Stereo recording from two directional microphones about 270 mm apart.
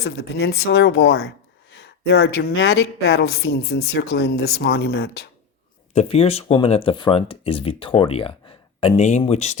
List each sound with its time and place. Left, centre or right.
0.0 s speech: left
5.9 s speech: left